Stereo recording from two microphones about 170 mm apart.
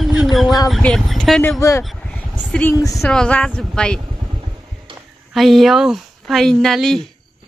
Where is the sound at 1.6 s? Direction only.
20° left (ahead or behind).